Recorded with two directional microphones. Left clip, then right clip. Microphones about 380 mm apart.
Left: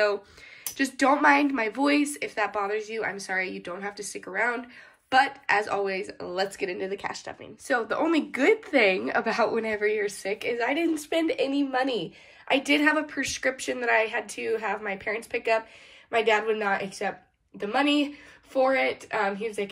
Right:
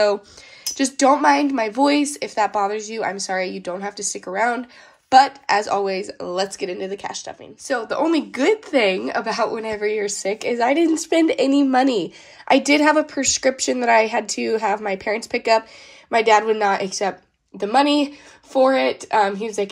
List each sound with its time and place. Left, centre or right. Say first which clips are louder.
0.7 s speech: right 6 dB; centre